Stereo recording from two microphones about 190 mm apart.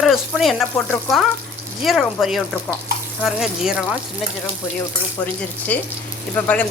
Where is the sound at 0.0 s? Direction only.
Centre (ahead or behind).